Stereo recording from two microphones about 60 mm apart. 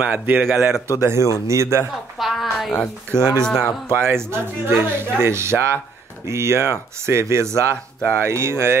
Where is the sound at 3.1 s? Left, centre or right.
Left.